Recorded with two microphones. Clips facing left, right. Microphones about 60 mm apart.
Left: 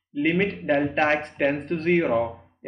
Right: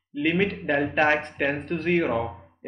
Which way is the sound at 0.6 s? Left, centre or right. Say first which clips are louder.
Left 1 dB; centre.